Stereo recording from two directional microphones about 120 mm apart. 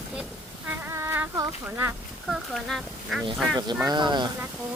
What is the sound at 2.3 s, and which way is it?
Speech, centre (ahead or behind).